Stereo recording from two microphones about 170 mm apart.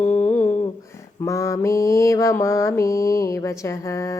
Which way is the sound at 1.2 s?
20° left (ahead or behind).